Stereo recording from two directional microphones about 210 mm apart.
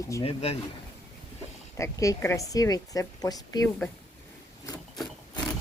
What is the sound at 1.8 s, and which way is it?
A woman's voice, 15° left (ahead or behind).